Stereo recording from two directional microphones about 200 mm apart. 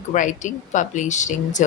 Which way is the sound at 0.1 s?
40° left (ahead or behind).